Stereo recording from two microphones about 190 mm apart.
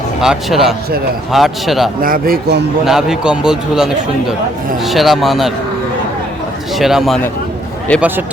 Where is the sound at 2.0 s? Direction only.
50° right (ahead or behind).